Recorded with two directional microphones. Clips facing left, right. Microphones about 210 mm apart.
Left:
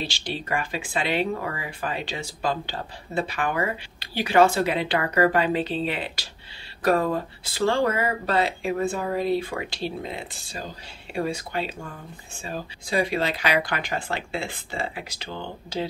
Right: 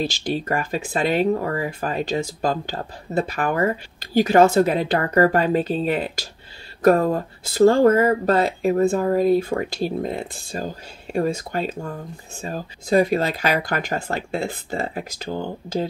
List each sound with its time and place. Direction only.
0.0 s speech: 45° right (ahead or behind)